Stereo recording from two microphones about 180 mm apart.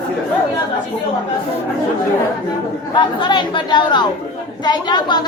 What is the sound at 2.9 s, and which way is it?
A woman's voice, 25° left (ahead or behind).